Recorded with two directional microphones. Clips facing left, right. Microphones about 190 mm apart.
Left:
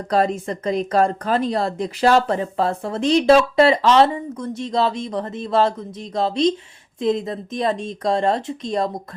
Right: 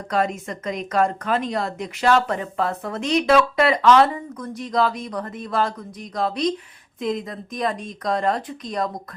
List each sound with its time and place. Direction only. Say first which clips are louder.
0.1 s speech: left 4 dB; 30° left (ahead or behind)